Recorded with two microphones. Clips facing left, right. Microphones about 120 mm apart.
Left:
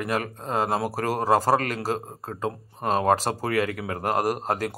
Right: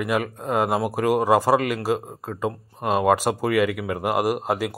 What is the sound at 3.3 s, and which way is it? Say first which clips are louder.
Speech: right 4 dB; 40° left (ahead or behind).